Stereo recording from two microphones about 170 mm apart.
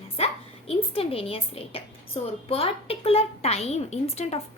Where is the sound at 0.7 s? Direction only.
35° left (ahead or behind).